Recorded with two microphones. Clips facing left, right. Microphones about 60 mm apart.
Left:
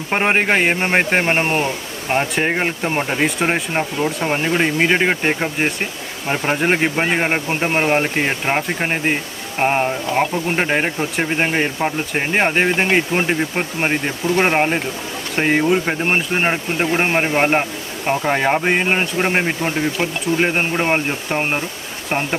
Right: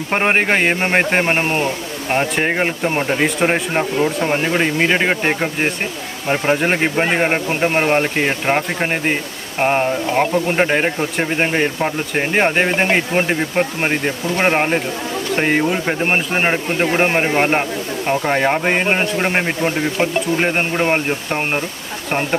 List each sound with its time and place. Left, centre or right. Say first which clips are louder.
0.1 s speech: even; centre
2.0 s speech: right 1 dB; centre